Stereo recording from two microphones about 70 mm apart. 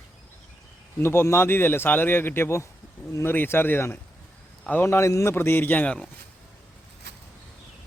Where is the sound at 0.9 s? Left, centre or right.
Left.